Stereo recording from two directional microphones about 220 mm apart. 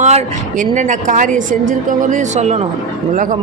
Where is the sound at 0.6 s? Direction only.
35° right (ahead or behind).